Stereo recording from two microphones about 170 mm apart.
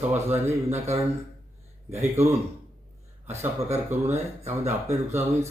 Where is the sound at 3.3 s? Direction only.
40° right (ahead or behind).